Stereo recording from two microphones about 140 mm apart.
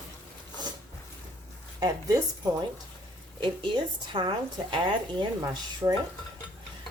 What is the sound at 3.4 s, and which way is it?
Speech, 35° right (ahead or behind).